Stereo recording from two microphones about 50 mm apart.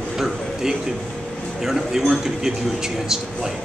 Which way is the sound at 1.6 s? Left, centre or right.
Centre.